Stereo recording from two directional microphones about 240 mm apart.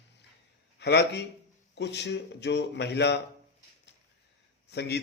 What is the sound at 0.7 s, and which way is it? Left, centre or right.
A man's voice, left.